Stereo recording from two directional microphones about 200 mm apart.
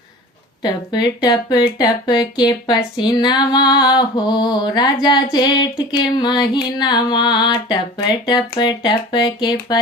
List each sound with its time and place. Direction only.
0.6 s speech: 20° left (ahead or behind)